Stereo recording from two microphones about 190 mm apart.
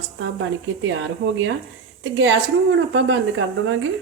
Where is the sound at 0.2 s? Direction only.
90° right.